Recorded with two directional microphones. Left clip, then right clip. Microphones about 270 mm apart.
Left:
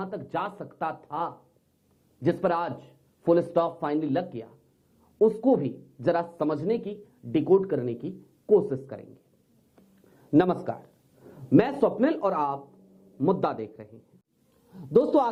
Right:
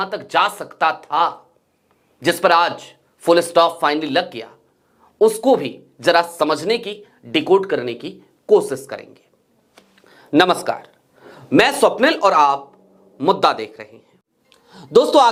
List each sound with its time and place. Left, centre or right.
0.0 s speech: centre
9.7 s a sound: centre
12.6 s speech: centre